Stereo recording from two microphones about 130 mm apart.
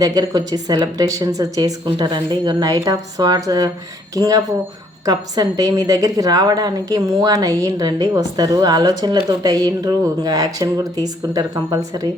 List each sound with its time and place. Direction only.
0.0 s a woman's voice: 30° right (ahead or behind)